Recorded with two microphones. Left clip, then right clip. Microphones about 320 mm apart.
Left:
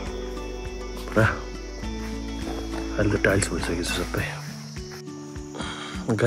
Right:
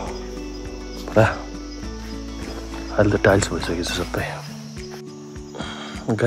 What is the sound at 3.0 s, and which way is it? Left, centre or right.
Speech, centre.